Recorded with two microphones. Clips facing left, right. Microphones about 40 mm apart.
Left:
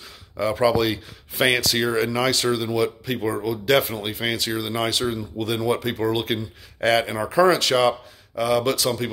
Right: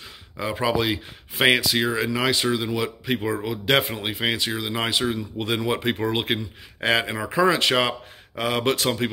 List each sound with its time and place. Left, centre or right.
0.4 s speech: centre